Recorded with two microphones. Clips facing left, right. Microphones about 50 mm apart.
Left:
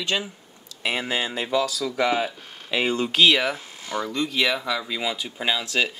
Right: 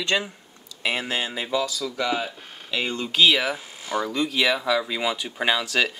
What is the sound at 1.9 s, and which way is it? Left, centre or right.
Speech, centre.